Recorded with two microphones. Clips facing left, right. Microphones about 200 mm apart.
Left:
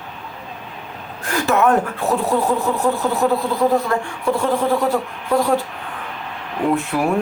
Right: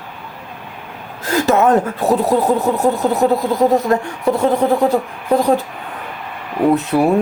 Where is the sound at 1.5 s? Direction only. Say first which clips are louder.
Right 2 dB; 20° right (ahead or behind).